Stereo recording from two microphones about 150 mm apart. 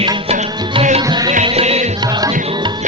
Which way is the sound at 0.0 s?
35° right (ahead or behind).